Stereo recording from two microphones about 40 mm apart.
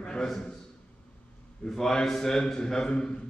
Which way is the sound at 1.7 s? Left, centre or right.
Centre.